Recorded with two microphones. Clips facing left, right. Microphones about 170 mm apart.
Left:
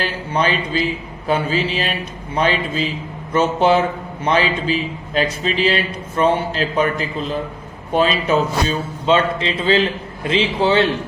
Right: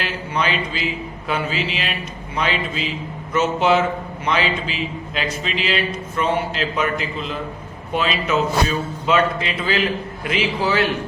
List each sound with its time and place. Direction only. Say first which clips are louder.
0.0 s a man's voice: left 3 dB; 35° left (ahead or behind)